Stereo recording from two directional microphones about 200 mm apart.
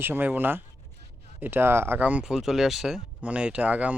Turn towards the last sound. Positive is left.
turn(degrees=-5)  # may be behind; listen again after turning